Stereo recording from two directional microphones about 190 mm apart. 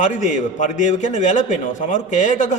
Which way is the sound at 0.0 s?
40° left (ahead or behind).